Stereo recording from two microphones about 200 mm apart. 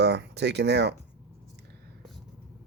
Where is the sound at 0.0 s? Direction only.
55° right (ahead or behind).